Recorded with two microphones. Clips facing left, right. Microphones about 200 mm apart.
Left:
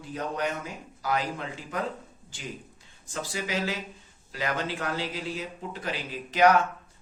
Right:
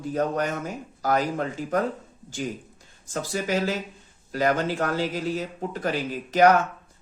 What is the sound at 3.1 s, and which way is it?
Speech, 45° right (ahead or behind).